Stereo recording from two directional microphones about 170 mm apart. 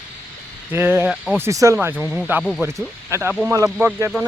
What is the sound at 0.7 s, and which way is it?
Speech, 15° right (ahead or behind).